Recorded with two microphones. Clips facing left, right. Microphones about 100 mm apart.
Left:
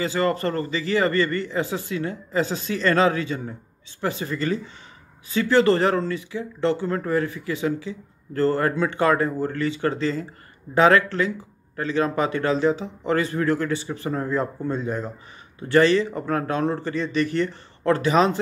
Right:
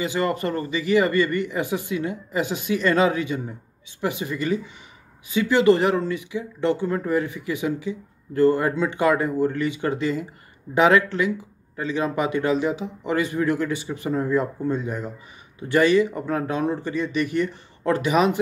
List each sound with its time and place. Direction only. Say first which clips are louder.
0.0 s speech: left 1 dB; 20° right (ahead or behind)
14.8 s speech: left 2 dB; 30° left (ahead or behind)
15.7 s speech: even; 15° right (ahead or behind)